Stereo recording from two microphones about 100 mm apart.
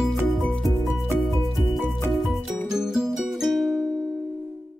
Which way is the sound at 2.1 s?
Centre (ahead or behind).